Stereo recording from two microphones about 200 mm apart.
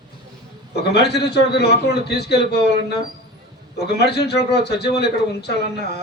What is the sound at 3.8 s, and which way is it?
Speech, 55° left (ahead or behind).